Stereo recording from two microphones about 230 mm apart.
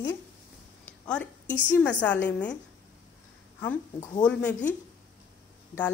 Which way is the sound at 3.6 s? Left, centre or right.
Centre.